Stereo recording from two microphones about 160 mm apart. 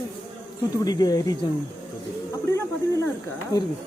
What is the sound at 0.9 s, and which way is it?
Speech, 25° left (ahead or behind).